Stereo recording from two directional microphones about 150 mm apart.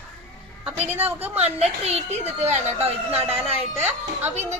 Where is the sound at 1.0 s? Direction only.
10° right (ahead or behind).